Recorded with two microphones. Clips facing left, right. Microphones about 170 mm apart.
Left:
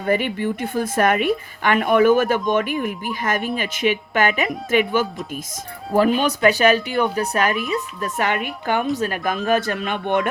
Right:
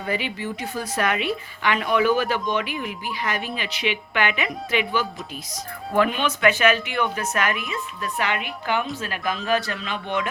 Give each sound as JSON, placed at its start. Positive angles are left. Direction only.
{"t": 0.0, "sound": "a woman's voice", "side_deg": 50}
{"t": 5.9, "sound": "speech", "side_deg": 35}
{"t": 7.7, "sound": "a woman's voice", "side_deg": 45}